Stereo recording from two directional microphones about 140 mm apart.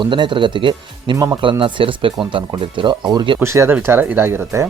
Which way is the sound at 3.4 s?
20° right (ahead or behind).